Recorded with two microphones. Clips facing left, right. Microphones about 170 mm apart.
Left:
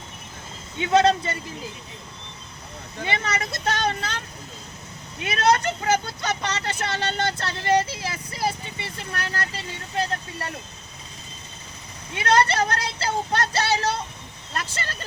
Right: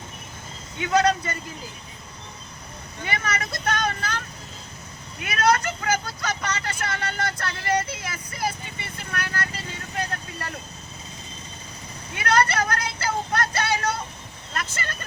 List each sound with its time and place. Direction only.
0.8 s speech: 25° left (ahead or behind)
3.0 s speech: 25° left (ahead or behind)
5.2 s speech: 25° left (ahead or behind)
12.1 s speech: 25° left (ahead or behind)